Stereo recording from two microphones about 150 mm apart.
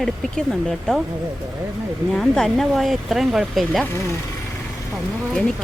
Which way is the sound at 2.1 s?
5° left (ahead or behind).